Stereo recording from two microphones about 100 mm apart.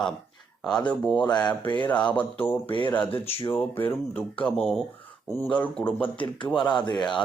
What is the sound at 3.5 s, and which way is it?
Speech, 20° left (ahead or behind).